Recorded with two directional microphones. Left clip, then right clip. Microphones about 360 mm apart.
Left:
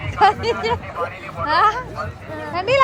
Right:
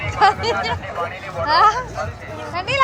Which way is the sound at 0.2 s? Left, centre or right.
Centre.